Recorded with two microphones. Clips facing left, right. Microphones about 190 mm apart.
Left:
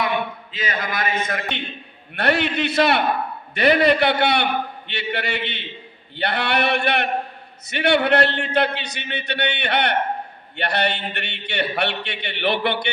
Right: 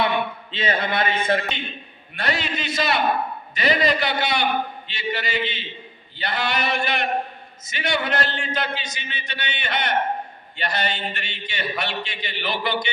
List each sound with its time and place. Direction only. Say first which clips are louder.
0.5 s a man's voice: right 4 dB; 30° right (ahead or behind)
2.1 s a man's voice: left 6 dB; 60° left (ahead or behind)